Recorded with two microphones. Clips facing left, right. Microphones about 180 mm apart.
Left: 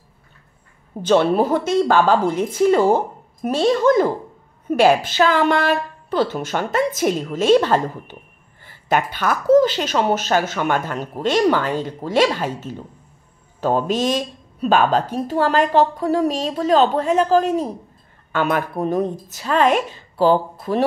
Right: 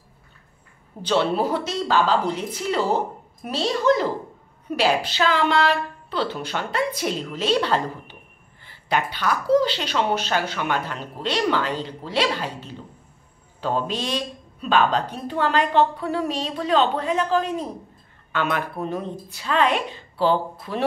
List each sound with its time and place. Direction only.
1.0 s speech: 50° left (ahead or behind)